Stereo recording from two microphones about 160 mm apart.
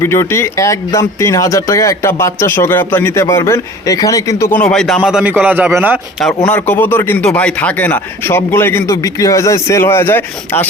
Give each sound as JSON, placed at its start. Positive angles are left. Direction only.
{"t": 0.0, "sound": "a man's voice", "side_deg": 15}
{"t": 6.1, "sound": "speech", "side_deg": 5}